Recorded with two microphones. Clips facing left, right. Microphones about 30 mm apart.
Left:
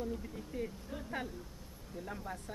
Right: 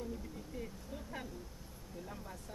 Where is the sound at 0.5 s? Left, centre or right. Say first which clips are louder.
Left 6 dB; left.